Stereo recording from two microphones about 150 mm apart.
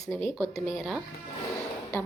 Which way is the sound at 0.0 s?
Centre (ahead or behind).